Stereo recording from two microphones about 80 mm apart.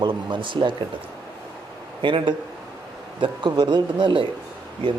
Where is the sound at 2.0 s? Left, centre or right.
Right.